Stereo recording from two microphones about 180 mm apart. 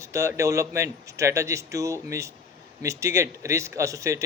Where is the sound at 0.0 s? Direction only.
15° right (ahead or behind).